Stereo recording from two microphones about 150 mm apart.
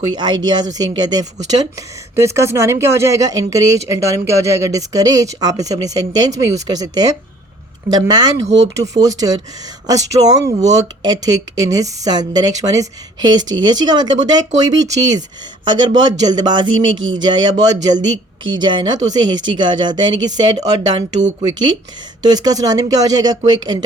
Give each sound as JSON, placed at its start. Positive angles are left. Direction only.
{"t": 0.1, "sound": "speech", "side_deg": -30}
{"t": 22.2, "sound": "speech", "side_deg": -25}